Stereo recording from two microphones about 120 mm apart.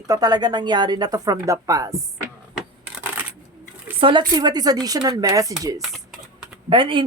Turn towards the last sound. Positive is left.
turn(degrees=-45)  # may be behind; listen again after turning